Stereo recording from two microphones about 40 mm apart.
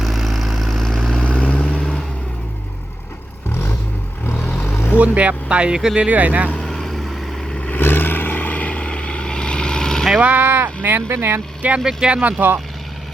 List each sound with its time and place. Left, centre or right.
0.0 s vehicle: centre
1.2 s vehicle: left
3.5 s vehicle: left
4.7 s vehicle: left
4.9 s speech: right; by 6.1 s centre
6.1 s speech: right
6.7 s vehicle: centre
7.8 s vehicle: left; by 10.1 s centre
10.2 s speech: right
11.1 s speech: right
11.6 s speech: right
11.9 s speech: right
12.2 s speech: right